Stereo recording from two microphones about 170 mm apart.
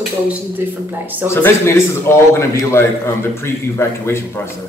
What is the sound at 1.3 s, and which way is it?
A man's voice, 15° left (ahead or behind).